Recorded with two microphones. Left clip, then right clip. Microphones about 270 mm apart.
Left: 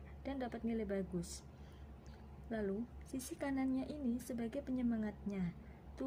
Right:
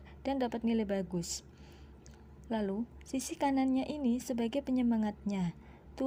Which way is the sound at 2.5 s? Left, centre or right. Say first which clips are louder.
Right 6 dB; right.